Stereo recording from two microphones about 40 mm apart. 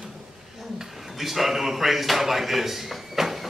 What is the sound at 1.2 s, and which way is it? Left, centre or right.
Speech, centre.